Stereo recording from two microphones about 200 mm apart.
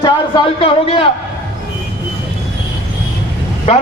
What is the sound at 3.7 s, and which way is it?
Speech, 30° left (ahead or behind).